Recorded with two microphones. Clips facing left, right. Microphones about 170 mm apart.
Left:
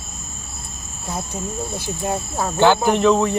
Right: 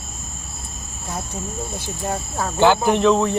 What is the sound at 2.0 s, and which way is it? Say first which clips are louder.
Speech: left 1 dB; 10° left (ahead or behind).